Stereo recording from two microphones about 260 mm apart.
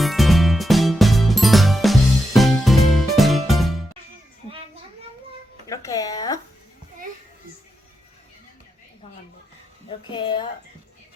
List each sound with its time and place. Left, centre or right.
0.0 s music: centre
5.6 s music: centre
10.1 s a sound: centre